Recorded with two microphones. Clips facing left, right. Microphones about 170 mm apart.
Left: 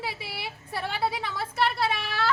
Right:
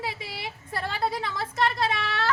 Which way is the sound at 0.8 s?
5° left (ahead or behind).